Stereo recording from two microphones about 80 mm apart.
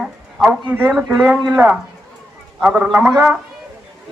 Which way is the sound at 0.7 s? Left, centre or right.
Right.